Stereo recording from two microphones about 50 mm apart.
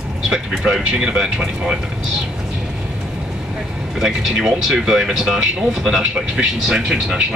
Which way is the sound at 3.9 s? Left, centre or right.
Centre.